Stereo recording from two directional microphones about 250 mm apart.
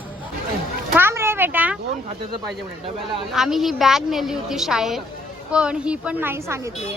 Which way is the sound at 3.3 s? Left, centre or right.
Centre.